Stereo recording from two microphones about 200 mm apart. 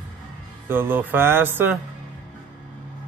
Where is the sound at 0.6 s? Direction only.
10° right (ahead or behind).